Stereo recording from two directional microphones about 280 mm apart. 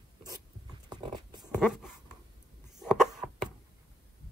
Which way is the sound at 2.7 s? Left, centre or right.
Centre.